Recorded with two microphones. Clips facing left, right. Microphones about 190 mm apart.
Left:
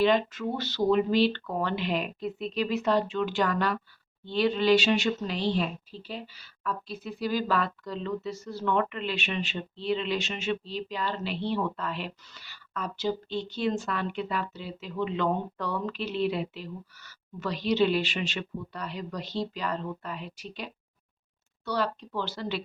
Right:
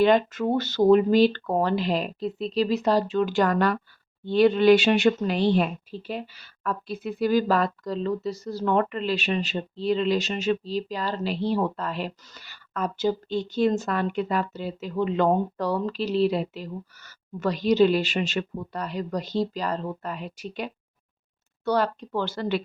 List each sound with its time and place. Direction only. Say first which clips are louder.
0.0 s speech: right 4 dB; 50° right (ahead or behind)